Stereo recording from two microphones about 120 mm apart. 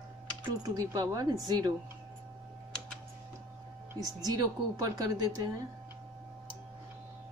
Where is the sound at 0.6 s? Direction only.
30° right (ahead or behind).